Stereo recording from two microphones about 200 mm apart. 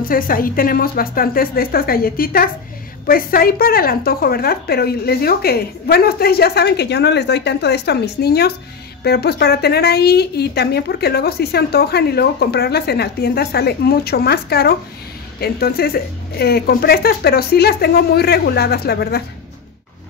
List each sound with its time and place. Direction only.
0.1 s a woman's voice: 45° left (ahead or behind)